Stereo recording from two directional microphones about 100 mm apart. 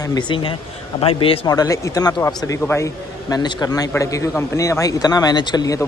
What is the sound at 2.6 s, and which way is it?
Speech, 25° left (ahead or behind).